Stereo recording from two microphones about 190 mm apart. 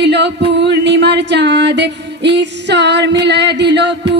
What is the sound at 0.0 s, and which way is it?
Music, 65° right (ahead or behind).